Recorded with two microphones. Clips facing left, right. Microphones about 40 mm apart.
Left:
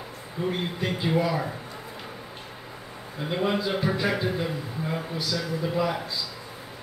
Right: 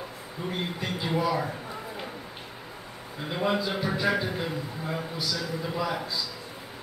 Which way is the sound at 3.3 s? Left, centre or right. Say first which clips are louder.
Left 1 dB; centre.